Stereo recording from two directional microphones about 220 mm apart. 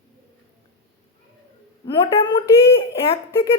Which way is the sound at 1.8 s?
20° left (ahead or behind).